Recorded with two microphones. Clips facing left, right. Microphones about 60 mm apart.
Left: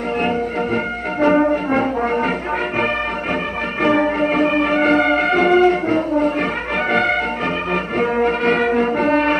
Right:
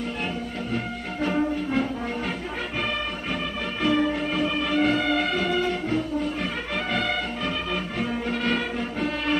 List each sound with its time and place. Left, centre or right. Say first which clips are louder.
1.2 s brass instrument: left 10 dB; left
3.8 s music: left 7 dB; left